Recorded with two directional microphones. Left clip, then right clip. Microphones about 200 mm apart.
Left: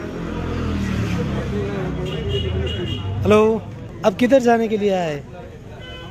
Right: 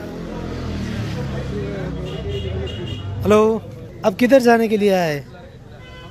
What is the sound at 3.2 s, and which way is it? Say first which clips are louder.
A man's voice: even; 15° right (ahead or behind).